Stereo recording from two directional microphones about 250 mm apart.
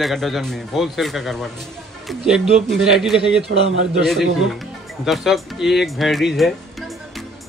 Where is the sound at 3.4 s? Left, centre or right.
Right.